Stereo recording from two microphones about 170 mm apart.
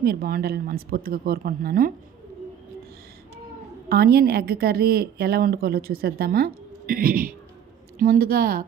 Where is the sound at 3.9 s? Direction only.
65° right (ahead or behind).